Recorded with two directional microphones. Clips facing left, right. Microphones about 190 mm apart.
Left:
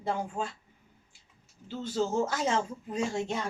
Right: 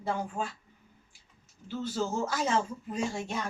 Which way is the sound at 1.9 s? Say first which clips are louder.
Left 4 dB; 20° left (ahead or behind).